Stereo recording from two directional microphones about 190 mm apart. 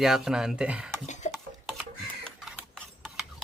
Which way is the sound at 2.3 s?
Centre (ahead or behind).